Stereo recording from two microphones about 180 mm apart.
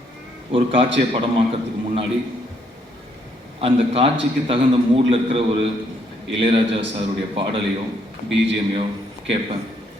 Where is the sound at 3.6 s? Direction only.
30° right (ahead or behind).